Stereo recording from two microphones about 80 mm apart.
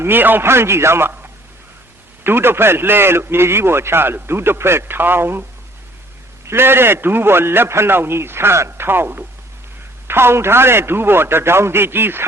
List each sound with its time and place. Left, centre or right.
0.0 s a man's voice: right